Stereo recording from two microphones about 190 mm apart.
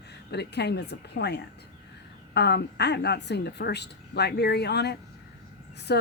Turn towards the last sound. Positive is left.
turn(degrees=60)  # may be behind; listen again after turning